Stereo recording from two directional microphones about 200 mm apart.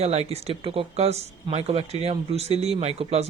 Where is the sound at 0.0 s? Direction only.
30° right (ahead or behind).